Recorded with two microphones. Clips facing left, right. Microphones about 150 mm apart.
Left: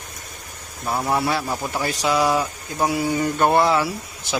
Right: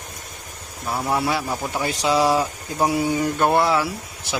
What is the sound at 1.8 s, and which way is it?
Speech, 25° right (ahead or behind).